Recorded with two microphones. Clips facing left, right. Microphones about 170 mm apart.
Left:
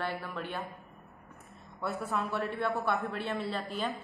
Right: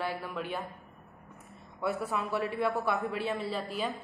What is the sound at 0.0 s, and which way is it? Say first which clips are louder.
Speech: right 1 dB; 5° right (ahead or behind).